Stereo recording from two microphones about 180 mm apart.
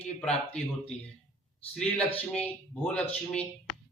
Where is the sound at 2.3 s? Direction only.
5° left (ahead or behind).